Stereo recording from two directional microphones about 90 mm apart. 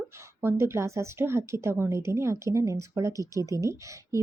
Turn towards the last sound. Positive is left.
turn(degrees=-35)  # may be behind; listen again after turning